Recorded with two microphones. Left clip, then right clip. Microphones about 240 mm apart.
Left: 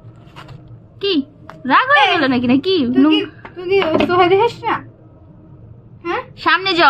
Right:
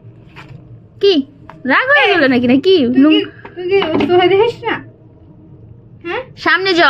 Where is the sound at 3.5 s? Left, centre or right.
Left.